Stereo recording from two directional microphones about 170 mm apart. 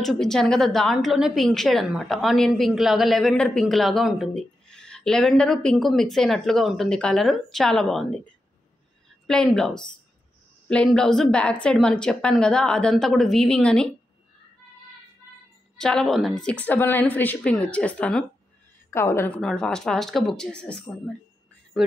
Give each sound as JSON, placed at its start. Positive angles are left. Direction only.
{"t": 0.0, "sound": "a woman's voice", "side_deg": 5}
{"t": 9.3, "sound": "a woman's voice", "side_deg": 5}
{"t": 15.8, "sound": "a woman's voice", "side_deg": 5}